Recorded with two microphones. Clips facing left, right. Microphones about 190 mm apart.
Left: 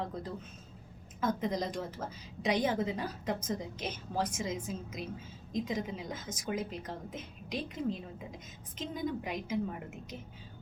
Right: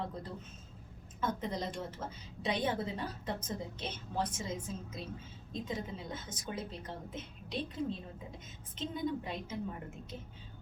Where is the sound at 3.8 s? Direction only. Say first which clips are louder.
Left 2 dB; 10° left (ahead or behind).